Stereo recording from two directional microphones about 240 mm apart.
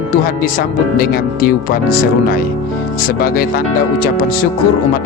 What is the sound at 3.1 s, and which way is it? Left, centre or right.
Speech, left.